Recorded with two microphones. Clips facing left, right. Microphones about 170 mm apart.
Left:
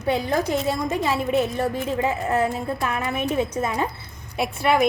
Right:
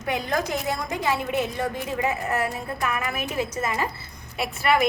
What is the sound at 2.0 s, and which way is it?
A woman's voice, 30° left (ahead or behind).